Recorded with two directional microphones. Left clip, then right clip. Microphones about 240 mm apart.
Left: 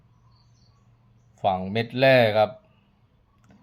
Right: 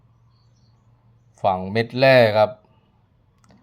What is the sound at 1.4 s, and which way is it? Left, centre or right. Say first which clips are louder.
Speech: right 4 dB; centre.